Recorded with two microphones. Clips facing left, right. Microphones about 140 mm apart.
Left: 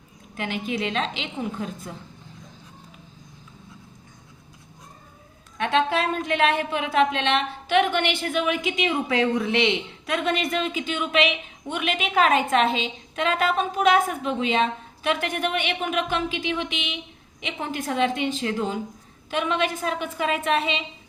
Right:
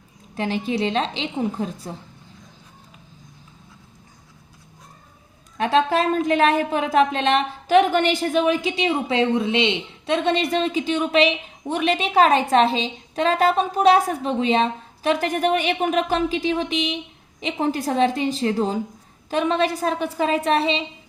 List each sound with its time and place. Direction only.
0.3 s a woman's voice: 35° right (ahead or behind)
5.5 s a woman's voice: 35° right (ahead or behind)